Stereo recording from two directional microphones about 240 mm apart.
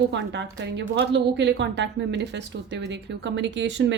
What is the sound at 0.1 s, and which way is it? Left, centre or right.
A woman's voice, right.